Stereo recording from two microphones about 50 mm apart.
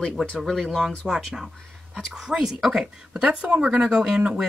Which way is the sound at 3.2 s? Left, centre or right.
Right.